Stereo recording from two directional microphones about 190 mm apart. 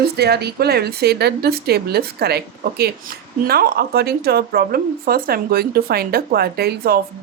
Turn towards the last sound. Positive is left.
turn(degrees=-55)  # may be behind; listen again after turning